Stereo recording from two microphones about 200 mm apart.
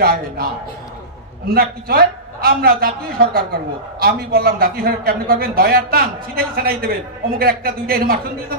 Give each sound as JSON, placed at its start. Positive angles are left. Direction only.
{"t": 0.0, "sound": "a man's voice", "side_deg": -50}
{"t": 1.5, "sound": "a man's voice", "side_deg": -50}